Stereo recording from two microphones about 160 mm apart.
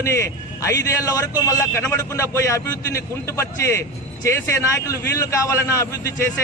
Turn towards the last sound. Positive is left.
turn(degrees=20)  # may be behind; listen again after turning